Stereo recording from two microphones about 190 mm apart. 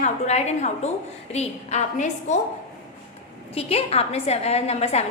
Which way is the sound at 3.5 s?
30° left (ahead or behind).